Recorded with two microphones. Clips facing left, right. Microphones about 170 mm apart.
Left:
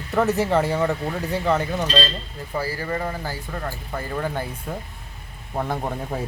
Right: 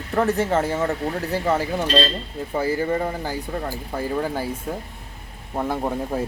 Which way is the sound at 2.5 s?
20° right (ahead or behind).